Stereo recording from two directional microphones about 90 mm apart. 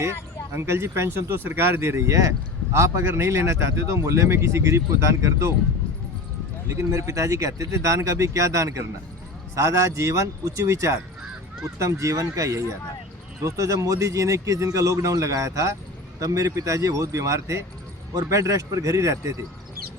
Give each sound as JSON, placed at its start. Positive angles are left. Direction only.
{"t": 0.5, "sound": "speech", "side_deg": -30}
{"t": 6.7, "sound": "speech", "side_deg": -35}